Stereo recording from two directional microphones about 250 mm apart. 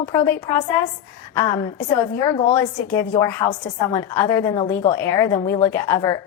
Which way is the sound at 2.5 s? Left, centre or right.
Centre.